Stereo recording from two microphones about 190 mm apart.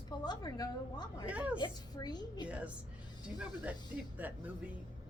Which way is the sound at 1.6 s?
20° left (ahead or behind).